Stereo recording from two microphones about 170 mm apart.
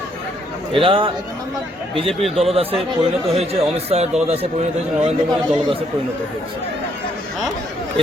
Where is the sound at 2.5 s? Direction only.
35° right (ahead or behind).